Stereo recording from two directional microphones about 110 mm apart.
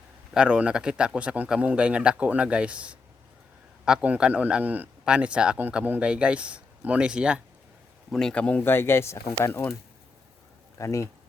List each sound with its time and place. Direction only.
0.3 s a man's voice: 10° right (ahead or behind)
8.1 s speech: 5° left (ahead or behind)
10.8 s speech: 30° left (ahead or behind)